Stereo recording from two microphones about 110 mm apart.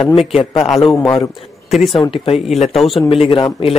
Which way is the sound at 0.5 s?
Centre (ahead or behind).